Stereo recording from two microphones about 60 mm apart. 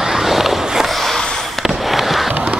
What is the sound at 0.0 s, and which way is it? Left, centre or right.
Fireworks, centre.